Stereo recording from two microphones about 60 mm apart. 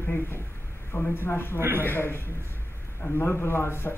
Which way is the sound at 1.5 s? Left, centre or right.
Right.